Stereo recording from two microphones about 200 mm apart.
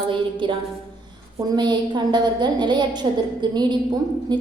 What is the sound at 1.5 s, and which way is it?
A woman's voice, 20° right (ahead or behind).